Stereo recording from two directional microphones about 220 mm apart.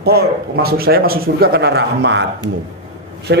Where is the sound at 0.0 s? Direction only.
45° right (ahead or behind).